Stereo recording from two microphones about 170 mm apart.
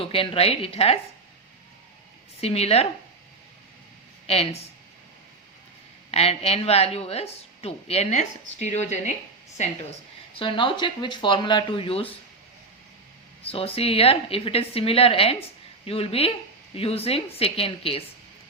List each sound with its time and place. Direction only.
0.0 s a woman's voice: 35° left (ahead or behind)
2.4 s a woman's voice: 35° left (ahead or behind)
4.3 s a woman's voice: 35° left (ahead or behind)
6.1 s a woman's voice: 35° left (ahead or behind)
10.3 s speech: 30° left (ahead or behind)
13.4 s a woman's voice: 35° left (ahead or behind)